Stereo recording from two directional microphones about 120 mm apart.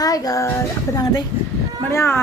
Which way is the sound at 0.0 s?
30° left (ahead or behind).